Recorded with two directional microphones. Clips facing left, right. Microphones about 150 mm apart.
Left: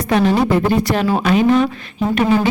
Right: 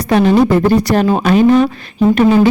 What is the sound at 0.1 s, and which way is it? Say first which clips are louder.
Speech: right 5 dB; 35° right (ahead or behind).